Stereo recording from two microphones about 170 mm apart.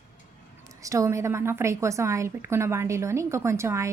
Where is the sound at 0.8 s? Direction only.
20° right (ahead or behind).